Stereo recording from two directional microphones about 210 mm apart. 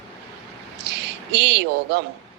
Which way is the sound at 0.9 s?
55° right (ahead or behind).